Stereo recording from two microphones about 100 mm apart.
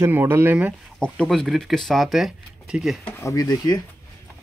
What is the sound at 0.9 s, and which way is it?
Speech, 10° left (ahead or behind).